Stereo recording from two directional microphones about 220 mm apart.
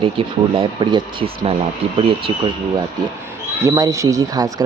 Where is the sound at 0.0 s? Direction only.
25° right (ahead or behind).